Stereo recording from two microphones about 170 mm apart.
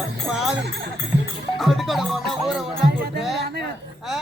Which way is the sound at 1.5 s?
Centre (ahead or behind).